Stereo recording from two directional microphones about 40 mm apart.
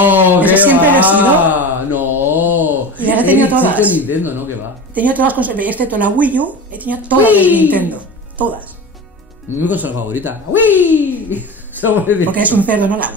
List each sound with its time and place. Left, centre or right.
0.0 s a sound: right
0.9 s mantra: right
6.2 s speech: right